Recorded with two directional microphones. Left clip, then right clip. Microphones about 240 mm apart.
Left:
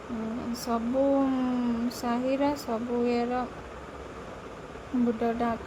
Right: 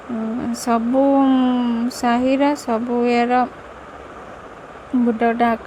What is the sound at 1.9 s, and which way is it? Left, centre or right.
Speech, right.